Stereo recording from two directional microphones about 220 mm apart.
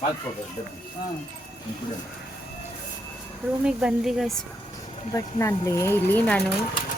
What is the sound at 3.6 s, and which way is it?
Speech, 5° right (ahead or behind).